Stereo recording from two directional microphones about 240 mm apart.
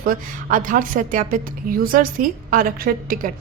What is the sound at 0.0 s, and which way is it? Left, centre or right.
A woman's voice, right.